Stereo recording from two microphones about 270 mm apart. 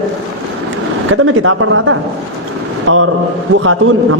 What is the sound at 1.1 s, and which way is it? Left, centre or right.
A man's voice, right.